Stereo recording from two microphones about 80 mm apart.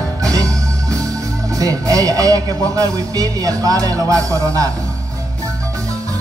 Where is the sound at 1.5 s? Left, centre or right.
Right.